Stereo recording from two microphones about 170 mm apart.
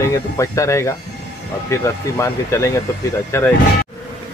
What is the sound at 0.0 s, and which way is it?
Speech, 20° left (ahead or behind).